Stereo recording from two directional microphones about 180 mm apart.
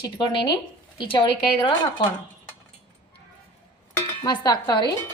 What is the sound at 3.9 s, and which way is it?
Dishes, 20° left (ahead or behind).